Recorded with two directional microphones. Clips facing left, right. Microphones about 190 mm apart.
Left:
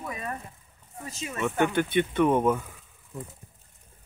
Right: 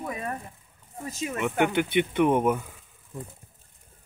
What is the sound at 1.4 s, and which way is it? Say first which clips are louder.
Speech: even; 15° right (ahead or behind).